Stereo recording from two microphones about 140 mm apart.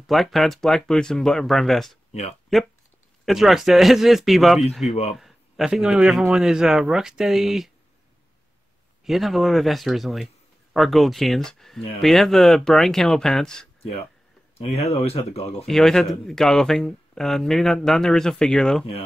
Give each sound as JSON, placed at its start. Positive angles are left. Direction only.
{"t": 0.0, "sound": "a man's voice", "side_deg": 0}
{"t": 9.0, "sound": "a man's voice", "side_deg": 0}
{"t": 14.6, "sound": "speech", "side_deg": 50}
{"t": 15.6, "sound": "a man's voice", "side_deg": 5}